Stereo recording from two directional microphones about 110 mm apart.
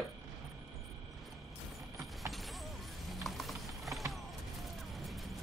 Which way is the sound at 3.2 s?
Centre (ahead or behind).